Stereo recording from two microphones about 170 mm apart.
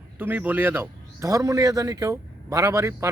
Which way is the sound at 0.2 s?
10° right (ahead or behind).